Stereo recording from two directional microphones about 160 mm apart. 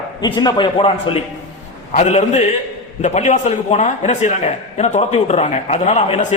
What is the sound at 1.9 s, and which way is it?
A man's voice, 45° left (ahead or behind).